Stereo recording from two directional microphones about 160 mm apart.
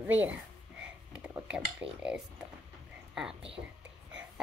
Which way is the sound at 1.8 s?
5° right (ahead or behind).